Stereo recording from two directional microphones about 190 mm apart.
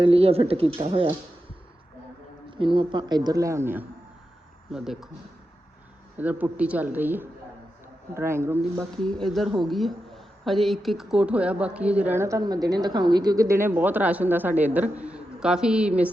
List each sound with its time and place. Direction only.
0.0 s a man's voice: 30° right (ahead or behind)
2.5 s a man's voice: 25° right (ahead or behind); by 5.0 s centre (ahead or behind)
6.1 s a woman's voice: 10° right (ahead or behind)
8.8 s a woman's voice: 5° left (ahead or behind)